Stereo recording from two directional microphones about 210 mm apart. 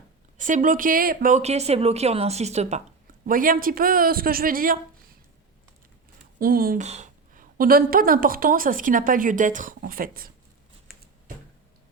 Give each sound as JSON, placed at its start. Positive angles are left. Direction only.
{"t": 0.3, "sound": "a woman's voice", "side_deg": -40}
{"t": 6.4, "sound": "a woman's voice", "side_deg": -45}